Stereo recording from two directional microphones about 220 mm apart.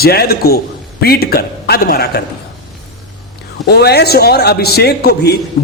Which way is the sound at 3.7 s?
50° left (ahead or behind).